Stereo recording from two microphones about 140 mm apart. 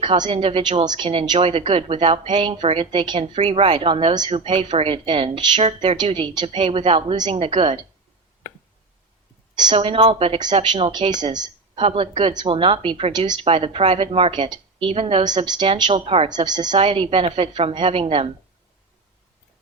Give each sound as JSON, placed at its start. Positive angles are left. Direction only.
{"t": 0.0, "sound": "a woman's voice", "side_deg": -35}
{"t": 9.6, "sound": "a woman's voice", "side_deg": -35}
{"t": 10.4, "sound": "a woman's voice", "side_deg": -35}
{"t": 16.3, "sound": "a woman's voice", "side_deg": -30}
{"t": 16.7, "sound": "a woman's voice", "side_deg": -40}